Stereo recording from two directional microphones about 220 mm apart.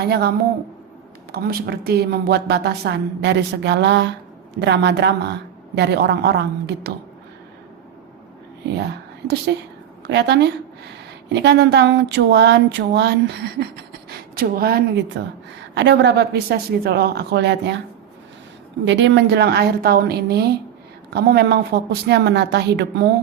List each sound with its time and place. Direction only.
0.0 s a woman's voice: 45° right (ahead or behind)
10.1 s a woman's voice: 50° right (ahead or behind)
18.9 s a woman's voice: 55° right (ahead or behind)